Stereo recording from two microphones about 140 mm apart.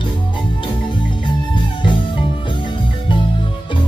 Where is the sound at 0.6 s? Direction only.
35° left (ahead or behind).